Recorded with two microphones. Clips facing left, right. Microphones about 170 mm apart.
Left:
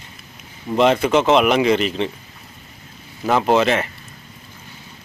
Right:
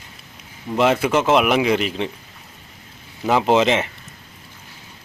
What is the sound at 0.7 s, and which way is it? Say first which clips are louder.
Speech: left 2 dB; 5° right (ahead or behind).